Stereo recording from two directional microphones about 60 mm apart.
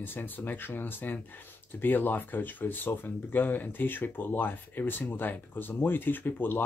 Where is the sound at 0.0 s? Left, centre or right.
Left.